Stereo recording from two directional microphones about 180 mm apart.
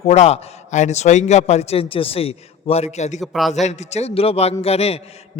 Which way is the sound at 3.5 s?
40° left (ahead or behind).